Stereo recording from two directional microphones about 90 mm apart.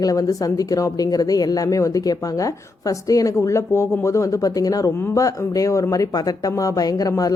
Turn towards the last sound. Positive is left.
turn(degrees=40)  # may be behind; listen again after turning